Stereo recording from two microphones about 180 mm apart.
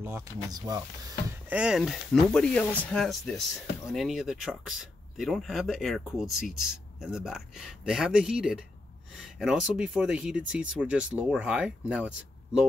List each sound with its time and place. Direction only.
0.0 s speech: 15° right (ahead or behind)
1.5 s speech: 5° right (ahead or behind)